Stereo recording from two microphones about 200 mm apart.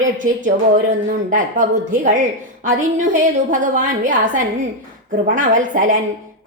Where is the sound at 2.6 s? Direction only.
40° right (ahead or behind).